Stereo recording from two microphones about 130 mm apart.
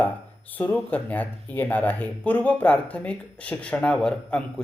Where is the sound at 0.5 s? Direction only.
15° left (ahead or behind).